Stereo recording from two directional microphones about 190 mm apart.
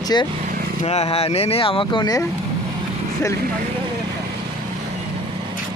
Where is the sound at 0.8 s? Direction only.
35° left (ahead or behind).